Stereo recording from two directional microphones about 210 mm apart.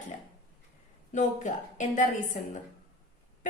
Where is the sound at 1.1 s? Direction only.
35° left (ahead or behind).